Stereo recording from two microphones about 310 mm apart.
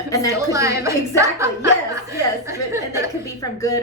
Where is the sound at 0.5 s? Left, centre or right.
Centre.